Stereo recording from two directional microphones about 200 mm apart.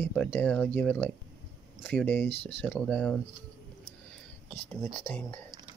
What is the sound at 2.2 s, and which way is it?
Speech, 30° left (ahead or behind).